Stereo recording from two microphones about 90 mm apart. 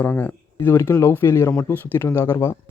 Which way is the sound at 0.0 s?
20° left (ahead or behind).